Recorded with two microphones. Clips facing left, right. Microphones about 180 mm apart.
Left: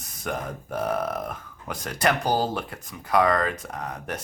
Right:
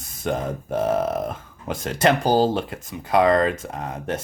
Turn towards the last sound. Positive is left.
turn(degrees=-25)  # may be behind; listen again after turning